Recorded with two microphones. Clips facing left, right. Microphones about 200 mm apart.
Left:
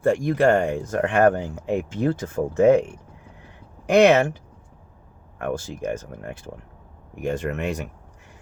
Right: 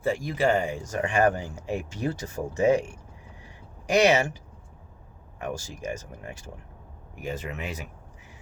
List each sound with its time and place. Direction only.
0.0 s speech: 5° right (ahead or behind)
0.5 s speech: 65° left (ahead or behind)
5.4 s speech: 55° left (ahead or behind)
7.2 s speech: 5° right (ahead or behind)